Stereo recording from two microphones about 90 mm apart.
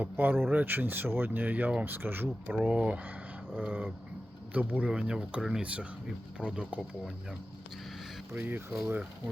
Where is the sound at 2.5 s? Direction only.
10° right (ahead or behind).